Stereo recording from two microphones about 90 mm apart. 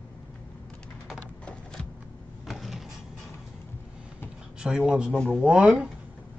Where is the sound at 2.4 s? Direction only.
Centre (ahead or behind).